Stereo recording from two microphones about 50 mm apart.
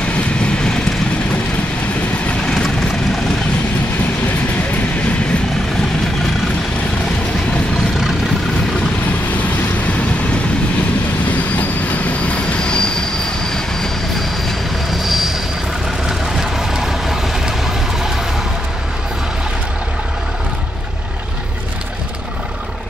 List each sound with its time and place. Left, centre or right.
0.1 s vehicle: centre
11.5 s train: left
12.6 s train: centre
13.5 s vehicle: centre
14.9 s vehicle: centre